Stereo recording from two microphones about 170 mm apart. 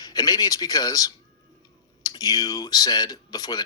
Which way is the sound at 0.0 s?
20° left (ahead or behind).